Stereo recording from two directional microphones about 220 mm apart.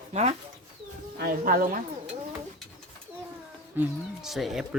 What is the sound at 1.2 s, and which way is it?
Speech, 40° right (ahead or behind).